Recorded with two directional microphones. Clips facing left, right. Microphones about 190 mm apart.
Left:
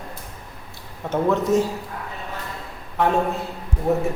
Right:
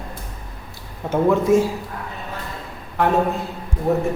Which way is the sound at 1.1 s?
10° right (ahead or behind).